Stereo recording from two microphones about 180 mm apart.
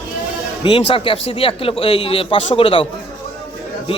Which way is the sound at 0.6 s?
30° left (ahead or behind).